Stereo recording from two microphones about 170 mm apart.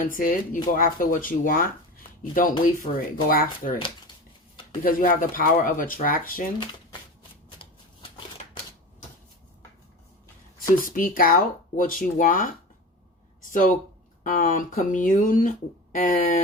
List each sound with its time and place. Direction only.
0.0 s speech: 55° left (ahead or behind)
3.8 s speech: 30° left (ahead or behind)
4.8 s speech: 55° left (ahead or behind)
10.8 s speech: 55° left (ahead or behind)
13.4 s a sound: 50° left (ahead or behind)
14.3 s speech: 50° left (ahead or behind)